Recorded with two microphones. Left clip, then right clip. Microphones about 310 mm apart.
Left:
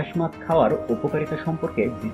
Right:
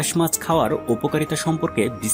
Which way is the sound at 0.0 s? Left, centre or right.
Right.